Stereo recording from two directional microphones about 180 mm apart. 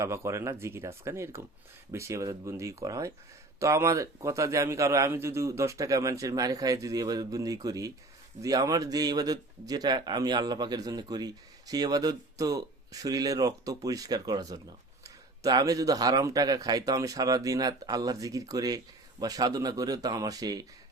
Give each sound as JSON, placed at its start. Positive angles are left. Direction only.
{"t": 0.0, "sound": "a man's voice", "side_deg": -15}